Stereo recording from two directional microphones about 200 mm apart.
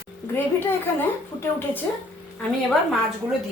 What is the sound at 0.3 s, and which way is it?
A woman's voice, 10° left (ahead or behind).